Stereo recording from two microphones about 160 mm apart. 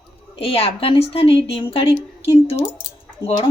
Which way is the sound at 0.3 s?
35° left (ahead or behind).